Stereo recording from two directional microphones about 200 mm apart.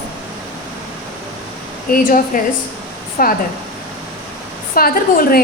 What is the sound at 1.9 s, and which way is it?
A woman's voice, 45° left (ahead or behind).